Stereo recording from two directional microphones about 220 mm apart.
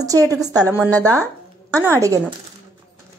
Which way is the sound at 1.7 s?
10° right (ahead or behind).